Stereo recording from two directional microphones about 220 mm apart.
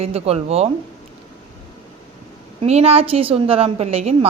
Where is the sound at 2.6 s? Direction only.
30° right (ahead or behind).